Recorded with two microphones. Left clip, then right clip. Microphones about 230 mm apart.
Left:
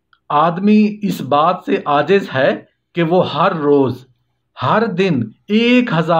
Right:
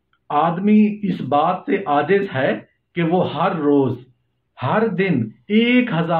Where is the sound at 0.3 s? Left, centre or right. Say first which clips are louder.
Left 4 dB; left.